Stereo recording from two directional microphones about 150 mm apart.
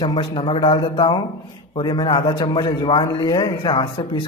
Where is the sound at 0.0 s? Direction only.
30° left (ahead or behind).